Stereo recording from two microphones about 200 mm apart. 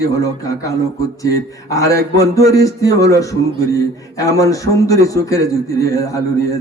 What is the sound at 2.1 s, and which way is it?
A man's voice, 15° left (ahead or behind).